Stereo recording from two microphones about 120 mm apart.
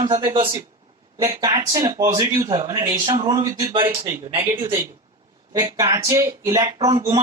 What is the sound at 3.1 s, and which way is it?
Speech, 50° right (ahead or behind).